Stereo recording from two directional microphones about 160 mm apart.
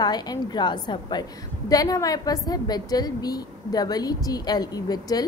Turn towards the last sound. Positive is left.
turn(degrees=25)  # may be behind; listen again after turning